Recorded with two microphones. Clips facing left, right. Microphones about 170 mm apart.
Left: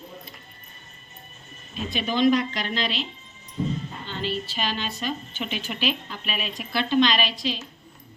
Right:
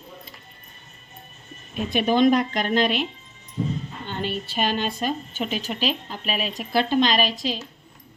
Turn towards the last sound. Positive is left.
turn(degrees=-45)  # may be behind; listen again after turning